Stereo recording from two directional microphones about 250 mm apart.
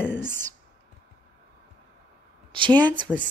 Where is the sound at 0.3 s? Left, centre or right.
Centre.